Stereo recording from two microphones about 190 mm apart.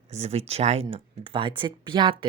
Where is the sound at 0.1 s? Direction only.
35° right (ahead or behind).